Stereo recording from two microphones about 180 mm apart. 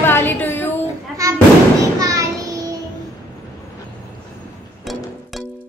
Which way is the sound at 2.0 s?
20° right (ahead or behind).